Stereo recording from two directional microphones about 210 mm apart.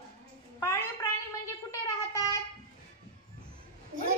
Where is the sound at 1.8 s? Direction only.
15° left (ahead or behind).